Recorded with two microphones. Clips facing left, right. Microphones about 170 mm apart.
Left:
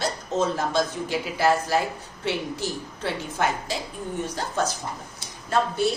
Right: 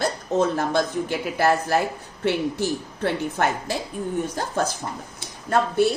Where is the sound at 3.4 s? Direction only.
55° right (ahead or behind).